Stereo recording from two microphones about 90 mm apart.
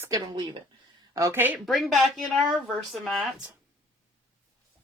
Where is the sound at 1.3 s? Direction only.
20° right (ahead or behind).